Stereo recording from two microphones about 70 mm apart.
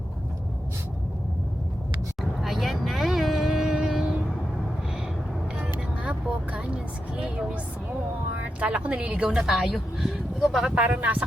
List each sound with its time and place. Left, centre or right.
2.4 s vehicle: centre
6.0 s vehicle: centre
8.6 s a woman's voice: centre
10.7 s a woman's voice: centre